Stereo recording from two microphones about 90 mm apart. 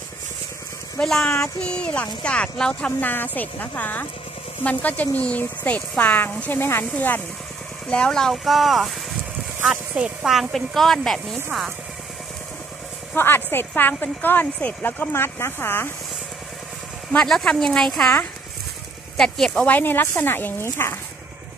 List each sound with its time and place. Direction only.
0.9 s speech: 5° left (ahead or behind); by 7.2 s 20° left (ahead or behind)
7.9 s speech: 10° left (ahead or behind)
13.1 s speech: 25° left (ahead or behind)
17.1 s speech: 5° left (ahead or behind)
19.1 s speech: 5° left (ahead or behind)
19.6 s speech: 20° left (ahead or behind)